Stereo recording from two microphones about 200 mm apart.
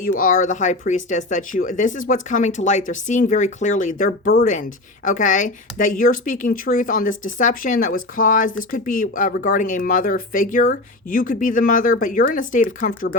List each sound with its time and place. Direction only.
0.0 s speech: 45° left (ahead or behind)